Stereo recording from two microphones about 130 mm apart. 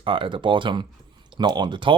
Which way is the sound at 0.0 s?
40° right (ahead or behind).